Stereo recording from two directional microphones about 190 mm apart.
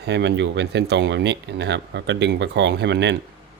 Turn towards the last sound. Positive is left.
turn(degrees=-65)  # may be behind; listen again after turning